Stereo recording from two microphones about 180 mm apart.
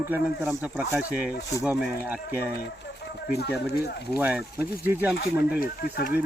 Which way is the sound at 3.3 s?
65° left (ahead or behind).